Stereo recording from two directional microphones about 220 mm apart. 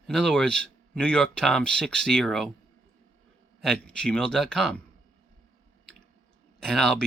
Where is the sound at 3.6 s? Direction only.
5° left (ahead or behind).